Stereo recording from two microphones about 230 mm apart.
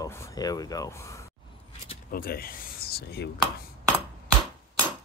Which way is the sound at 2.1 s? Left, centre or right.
Left.